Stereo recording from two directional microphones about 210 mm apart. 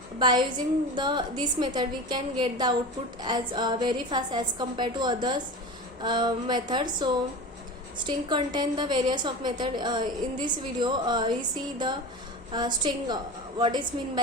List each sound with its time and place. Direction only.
0.2 s a woman's voice: 20° right (ahead or behind)
7.9 s a woman's voice: 20° right (ahead or behind)